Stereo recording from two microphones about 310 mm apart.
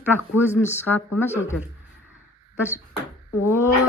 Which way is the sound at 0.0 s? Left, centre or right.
Centre.